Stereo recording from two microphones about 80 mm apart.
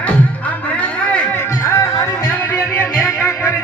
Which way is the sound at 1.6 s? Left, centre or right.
Left.